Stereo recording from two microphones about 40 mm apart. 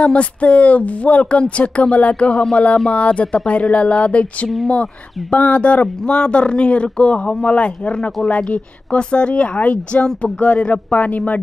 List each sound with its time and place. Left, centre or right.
0.0 s speech: left
9.6 s speech: left